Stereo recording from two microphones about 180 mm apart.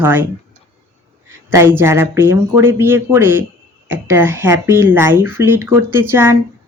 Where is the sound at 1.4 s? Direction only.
10° right (ahead or behind).